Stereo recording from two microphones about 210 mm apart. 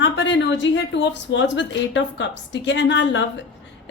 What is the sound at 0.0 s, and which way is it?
A woman's voice, 60° left (ahead or behind).